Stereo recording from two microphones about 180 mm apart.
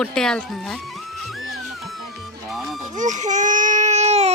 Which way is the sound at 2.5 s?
Centre (ahead or behind).